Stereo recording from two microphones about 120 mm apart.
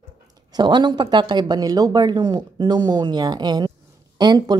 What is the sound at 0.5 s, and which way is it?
A woman's voice, 35° right (ahead or behind).